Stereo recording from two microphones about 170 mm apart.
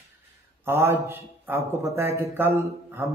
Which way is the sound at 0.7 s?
15° right (ahead or behind).